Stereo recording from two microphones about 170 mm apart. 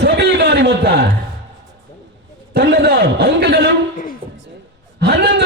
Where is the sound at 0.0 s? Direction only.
75° right (ahead or behind).